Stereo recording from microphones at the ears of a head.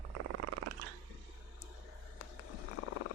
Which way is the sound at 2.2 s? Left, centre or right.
Left.